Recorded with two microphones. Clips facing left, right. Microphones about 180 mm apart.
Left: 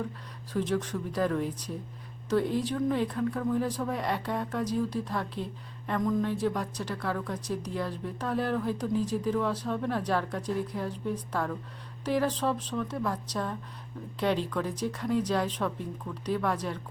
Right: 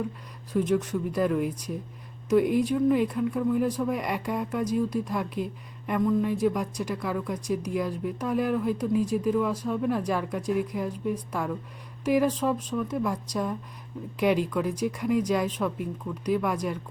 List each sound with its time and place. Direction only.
0.7 s speech: 10° right (ahead or behind)